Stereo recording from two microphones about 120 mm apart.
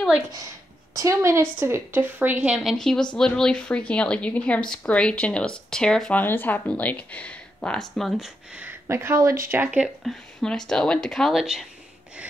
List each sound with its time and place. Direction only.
0.3 s a woman's voice: 30° right (ahead or behind); by 2.7 s 10° right (ahead or behind)
2.7 s a woman's voice: 5° left (ahead or behind)
6.2 s a woman's voice: 15° left (ahead or behind)
8.5 s speech: 20° right (ahead or behind)
10.0 s speech: 5° left (ahead or behind)